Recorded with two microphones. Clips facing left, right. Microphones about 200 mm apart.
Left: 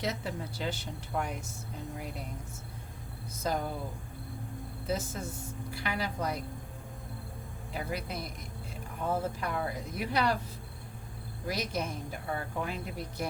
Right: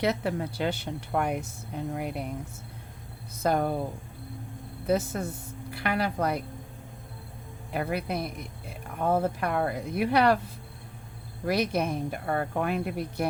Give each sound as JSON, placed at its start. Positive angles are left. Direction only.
{"t": 0.0, "sound": "speech", "side_deg": -65}
{"t": 3.4, "sound": "speech", "side_deg": -60}
{"t": 4.9, "sound": "speech", "side_deg": -60}
{"t": 7.7, "sound": "speech", "side_deg": -60}
{"t": 11.4, "sound": "speech", "side_deg": -60}